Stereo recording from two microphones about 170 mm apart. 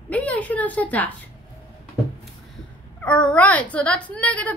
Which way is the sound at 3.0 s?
5° left (ahead or behind).